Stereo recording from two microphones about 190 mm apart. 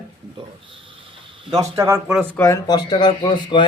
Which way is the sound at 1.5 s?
20° right (ahead or behind).